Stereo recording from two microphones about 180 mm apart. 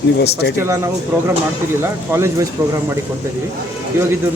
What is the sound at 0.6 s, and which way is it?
Speech, 15° right (ahead or behind).